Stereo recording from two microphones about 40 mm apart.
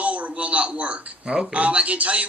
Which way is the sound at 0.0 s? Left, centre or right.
Right.